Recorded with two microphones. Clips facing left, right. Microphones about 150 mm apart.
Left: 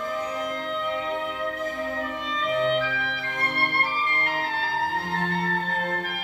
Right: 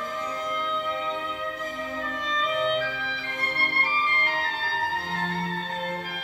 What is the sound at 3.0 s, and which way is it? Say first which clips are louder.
Music: left 3 dB; 60° left (ahead or behind).